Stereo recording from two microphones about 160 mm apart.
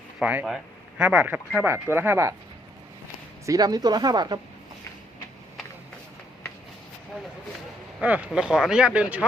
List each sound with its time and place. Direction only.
0.2 s speech: 10° right (ahead or behind)
3.4 s speech: 20° right (ahead or behind)
8.0 s speech: 10° right (ahead or behind)